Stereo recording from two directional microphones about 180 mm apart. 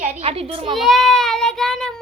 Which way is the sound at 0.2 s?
35° right (ahead or behind).